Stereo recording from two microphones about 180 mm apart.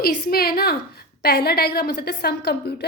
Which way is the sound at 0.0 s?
60° left (ahead or behind).